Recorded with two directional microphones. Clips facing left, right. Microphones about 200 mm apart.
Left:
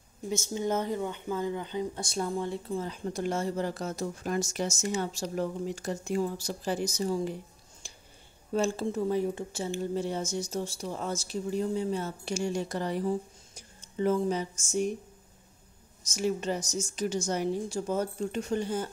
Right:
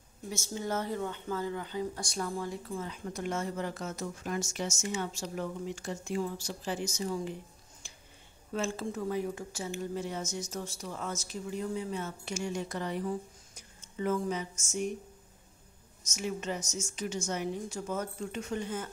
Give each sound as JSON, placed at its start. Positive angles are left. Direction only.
{"t": 0.3, "sound": "speech", "side_deg": 20}
{"t": 8.5, "sound": "speech", "side_deg": 30}
{"t": 16.1, "sound": "speech", "side_deg": 35}